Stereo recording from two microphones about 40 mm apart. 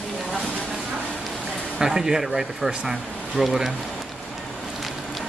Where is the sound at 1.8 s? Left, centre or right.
Centre.